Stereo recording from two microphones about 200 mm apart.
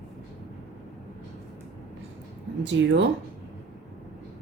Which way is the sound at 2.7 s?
60° right (ahead or behind).